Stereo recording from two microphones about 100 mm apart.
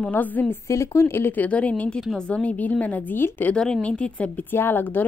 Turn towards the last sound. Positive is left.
turn(degrees=20)  # may be behind; listen again after turning